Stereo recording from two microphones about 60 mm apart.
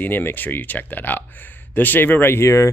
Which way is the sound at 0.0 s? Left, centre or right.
Left.